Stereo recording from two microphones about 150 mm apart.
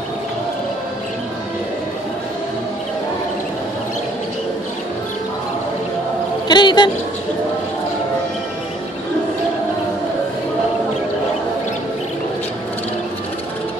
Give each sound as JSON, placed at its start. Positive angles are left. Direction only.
{"t": 6.4, "sound": "a man's voice", "side_deg": 30}